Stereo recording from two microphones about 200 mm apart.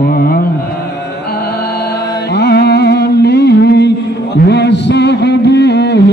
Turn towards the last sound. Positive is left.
turn(degrees=60)  # may be behind; listen again after turning